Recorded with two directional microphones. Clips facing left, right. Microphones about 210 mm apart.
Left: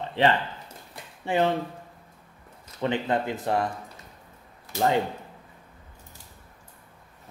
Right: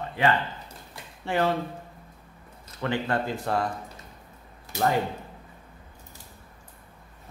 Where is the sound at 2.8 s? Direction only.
20° left (ahead or behind).